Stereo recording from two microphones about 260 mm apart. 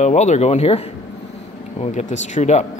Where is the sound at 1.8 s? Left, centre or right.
Left.